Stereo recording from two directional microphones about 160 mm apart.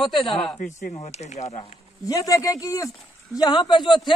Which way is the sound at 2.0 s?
20° left (ahead or behind).